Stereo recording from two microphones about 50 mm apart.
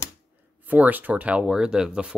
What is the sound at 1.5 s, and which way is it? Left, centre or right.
Speech, centre.